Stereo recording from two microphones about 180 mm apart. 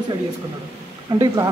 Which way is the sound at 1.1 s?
20° right (ahead or behind).